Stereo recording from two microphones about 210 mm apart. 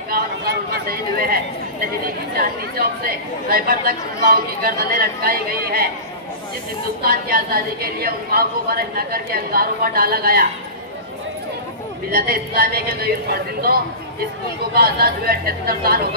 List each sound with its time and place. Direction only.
0.1 s a sound: 45° right (ahead or behind)
2.3 s a woman's voice: 45° right (ahead or behind)
7.0 s a woman's voice: 45° right (ahead or behind)
12.1 s a woman's voice: 45° right (ahead or behind)